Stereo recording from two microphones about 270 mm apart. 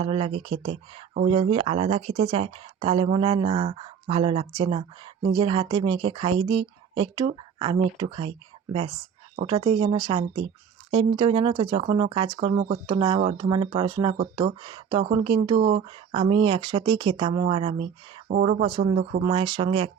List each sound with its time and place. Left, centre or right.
0.0 s speech: right
9.3 s speech: right
18.3 s speech: right